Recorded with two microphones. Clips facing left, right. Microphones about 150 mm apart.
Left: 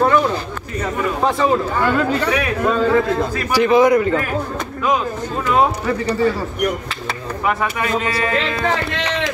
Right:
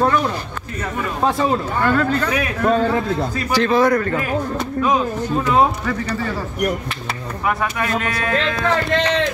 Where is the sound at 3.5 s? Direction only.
15° left (ahead or behind).